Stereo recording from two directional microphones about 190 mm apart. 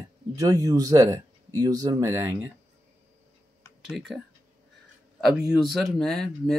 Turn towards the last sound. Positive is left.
turn(degrees=0)  # may be behind; listen again after turning